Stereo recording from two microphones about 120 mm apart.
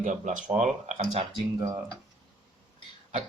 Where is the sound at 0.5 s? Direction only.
80° right.